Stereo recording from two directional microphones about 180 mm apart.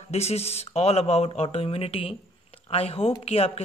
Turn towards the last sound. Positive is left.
turn(degrees=35)  # may be behind; listen again after turning